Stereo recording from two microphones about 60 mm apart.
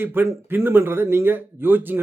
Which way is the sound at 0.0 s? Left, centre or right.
Right.